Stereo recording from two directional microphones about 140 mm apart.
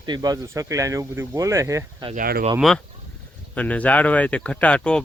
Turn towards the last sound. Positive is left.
turn(degrees=10)  # may be behind; listen again after turning